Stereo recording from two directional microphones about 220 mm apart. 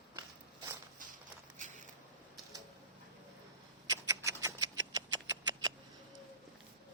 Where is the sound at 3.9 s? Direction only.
15° right (ahead or behind).